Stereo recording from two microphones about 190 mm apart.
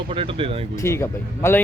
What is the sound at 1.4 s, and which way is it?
Speech, 10° left (ahead or behind).